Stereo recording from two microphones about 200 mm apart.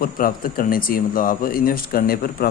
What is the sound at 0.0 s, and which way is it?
Speech, 45° left (ahead or behind).